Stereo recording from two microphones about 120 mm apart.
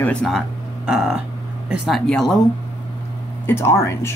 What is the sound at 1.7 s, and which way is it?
Speech, 5° right (ahead or behind).